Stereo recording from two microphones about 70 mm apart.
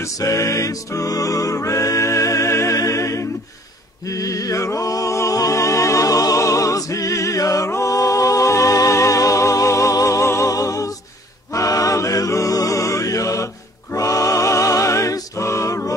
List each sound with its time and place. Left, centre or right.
0.0 s music: left